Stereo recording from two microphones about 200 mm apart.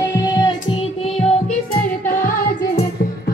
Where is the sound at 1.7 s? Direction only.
45° left (ahead or behind).